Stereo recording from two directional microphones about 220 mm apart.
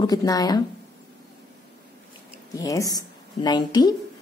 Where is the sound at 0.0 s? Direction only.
15° left (ahead or behind).